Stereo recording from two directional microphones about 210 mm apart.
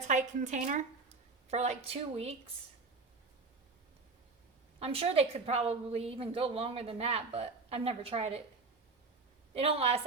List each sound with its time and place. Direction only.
0.1 s a woman's voice: 35° right (ahead or behind)
4.8 s a woman's voice: 30° right (ahead or behind)
9.6 s a woman's voice: 30° right (ahead or behind)